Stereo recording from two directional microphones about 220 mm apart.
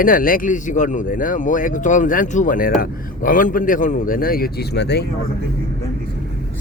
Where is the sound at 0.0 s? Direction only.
40° left (ahead or behind).